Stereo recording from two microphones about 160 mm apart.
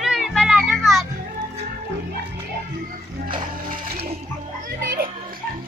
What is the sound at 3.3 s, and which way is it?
Music, 55° right (ahead or behind).